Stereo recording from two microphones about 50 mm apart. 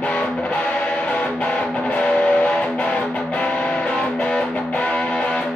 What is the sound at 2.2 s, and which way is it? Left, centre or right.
Music, left.